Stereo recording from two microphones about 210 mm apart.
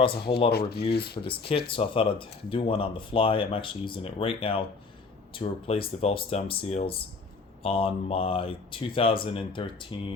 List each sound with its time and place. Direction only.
0.5 s speech: 50° left (ahead or behind)
1.2 s speech: 25° left (ahead or behind)